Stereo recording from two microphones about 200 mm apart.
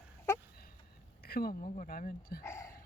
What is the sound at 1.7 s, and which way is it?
Speech, 40° left (ahead or behind).